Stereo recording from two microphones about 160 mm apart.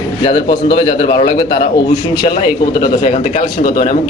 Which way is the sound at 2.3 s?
65° left (ahead or behind).